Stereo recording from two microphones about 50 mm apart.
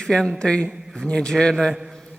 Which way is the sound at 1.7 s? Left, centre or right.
Centre.